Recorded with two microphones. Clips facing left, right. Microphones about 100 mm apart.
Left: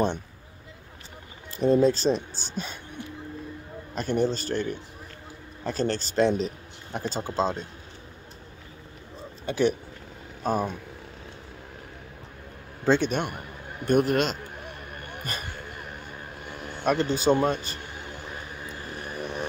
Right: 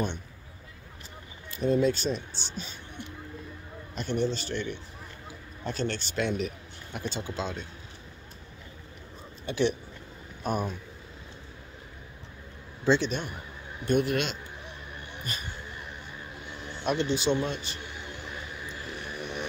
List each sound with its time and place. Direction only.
1.5 s speech: 35° left (ahead or behind)
3.9 s speech: 40° left (ahead or behind)
9.5 s speech: 40° left (ahead or behind)
12.8 s a man's voice: 50° left (ahead or behind)
13.8 s speech: 45° left (ahead or behind)
14.6 s a sound: 55° left (ahead or behind)
18.9 s vehicle: 40° left (ahead or behind)